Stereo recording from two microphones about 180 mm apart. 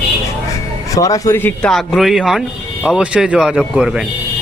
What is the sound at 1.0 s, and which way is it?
Speech, 20° left (ahead or behind).